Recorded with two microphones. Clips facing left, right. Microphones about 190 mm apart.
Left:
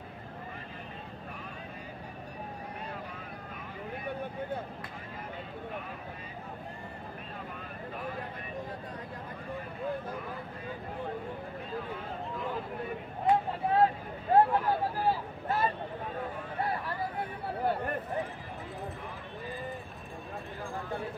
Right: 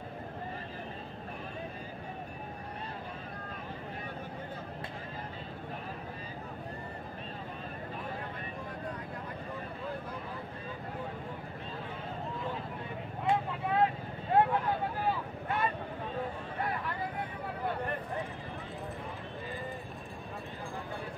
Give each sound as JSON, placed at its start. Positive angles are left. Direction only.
{"t": 13.3, "sound": "vehicle", "side_deg": 35}